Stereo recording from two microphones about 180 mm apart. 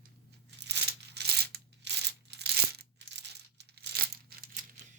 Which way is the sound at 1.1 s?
65° right (ahead or behind).